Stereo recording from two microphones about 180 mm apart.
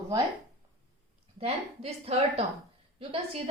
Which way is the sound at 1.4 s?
35° right (ahead or behind).